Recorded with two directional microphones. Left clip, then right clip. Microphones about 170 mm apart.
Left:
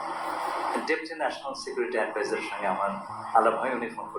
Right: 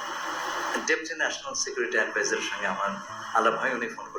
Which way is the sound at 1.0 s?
40° right (ahead or behind).